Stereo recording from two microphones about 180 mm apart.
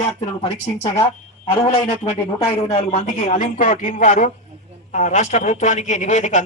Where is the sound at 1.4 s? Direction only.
35° left (ahead or behind).